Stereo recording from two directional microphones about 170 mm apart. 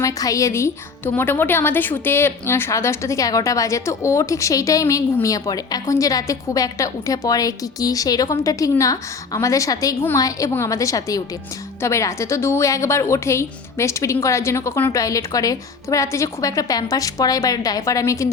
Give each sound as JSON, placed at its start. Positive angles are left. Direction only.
{"t": 0.0, "sound": "a woman's voice", "side_deg": 20}